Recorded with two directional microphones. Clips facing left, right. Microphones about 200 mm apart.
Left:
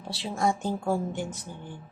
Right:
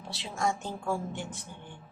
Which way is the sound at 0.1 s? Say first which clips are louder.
Left 4 dB; 35° left (ahead or behind).